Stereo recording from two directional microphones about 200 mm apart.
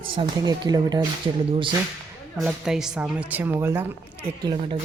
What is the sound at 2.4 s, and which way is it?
A woman's voice, 5° right (ahead or behind).